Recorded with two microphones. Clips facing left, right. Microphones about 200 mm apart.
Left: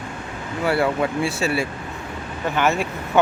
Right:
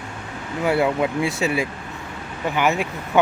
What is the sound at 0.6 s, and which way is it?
Speech, 15° right (ahead or behind).